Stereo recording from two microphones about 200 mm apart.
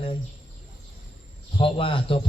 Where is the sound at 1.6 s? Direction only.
25° left (ahead or behind).